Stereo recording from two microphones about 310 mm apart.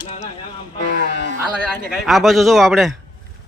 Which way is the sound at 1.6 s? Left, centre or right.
Centre.